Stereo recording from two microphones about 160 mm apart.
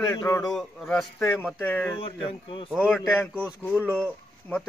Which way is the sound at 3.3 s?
10° right (ahead or behind).